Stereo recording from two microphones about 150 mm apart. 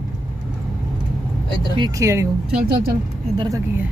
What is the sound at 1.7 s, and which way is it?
Speech, 25° right (ahead or behind).